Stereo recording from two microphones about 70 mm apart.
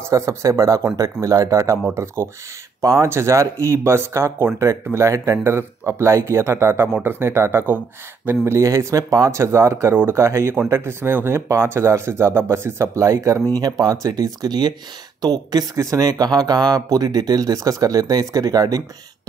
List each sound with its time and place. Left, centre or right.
0.1 s speech: right
2.8 s speech: right
3.1 s speech: right
8.3 s speech: right
9.4 s speech: right
13.6 s speech: right
15.2 s speech: right